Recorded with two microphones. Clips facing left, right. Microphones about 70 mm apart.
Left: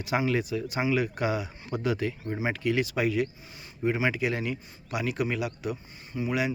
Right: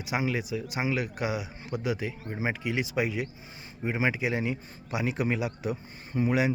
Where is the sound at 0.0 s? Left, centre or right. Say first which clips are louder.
Left 3 dB; centre.